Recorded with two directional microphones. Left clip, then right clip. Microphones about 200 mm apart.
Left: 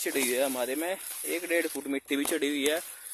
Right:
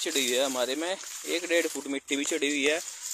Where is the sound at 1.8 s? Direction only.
15° left (ahead or behind).